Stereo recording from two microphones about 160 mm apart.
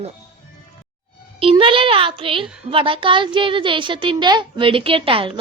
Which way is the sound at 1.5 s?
35° right (ahead or behind).